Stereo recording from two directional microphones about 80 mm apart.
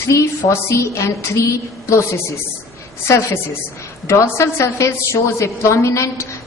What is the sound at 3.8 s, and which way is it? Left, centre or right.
A woman's voice, left.